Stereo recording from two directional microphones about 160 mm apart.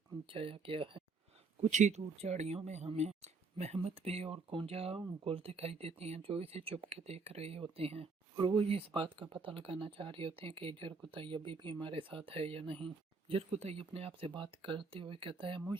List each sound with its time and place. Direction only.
0.3 s speech: 35° right (ahead or behind)
1.6 s speech: 45° right (ahead or behind)